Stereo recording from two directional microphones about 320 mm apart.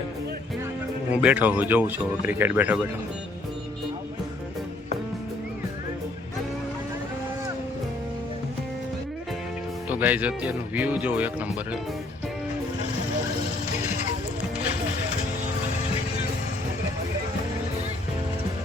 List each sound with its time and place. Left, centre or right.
1.2 s speech: centre
9.9 s speech: centre